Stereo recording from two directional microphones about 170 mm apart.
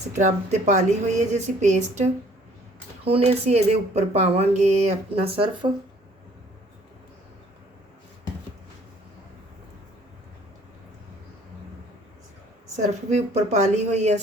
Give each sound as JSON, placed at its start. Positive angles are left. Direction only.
{"t": 0.2, "sound": "a woman's voice", "side_deg": -45}
{"t": 12.7, "sound": "speech", "side_deg": -40}